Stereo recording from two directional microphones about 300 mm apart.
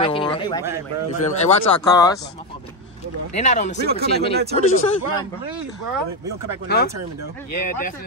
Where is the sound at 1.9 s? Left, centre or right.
Centre.